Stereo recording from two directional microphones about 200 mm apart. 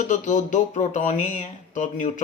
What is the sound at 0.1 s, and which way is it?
Speech, 40° left (ahead or behind).